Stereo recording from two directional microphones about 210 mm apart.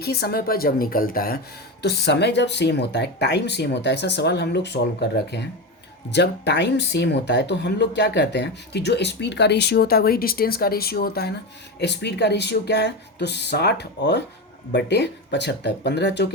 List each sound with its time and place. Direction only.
0.0 s speech: 50° left (ahead or behind)